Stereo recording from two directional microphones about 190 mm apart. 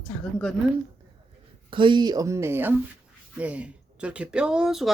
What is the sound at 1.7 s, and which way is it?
Speech, 25° right (ahead or behind).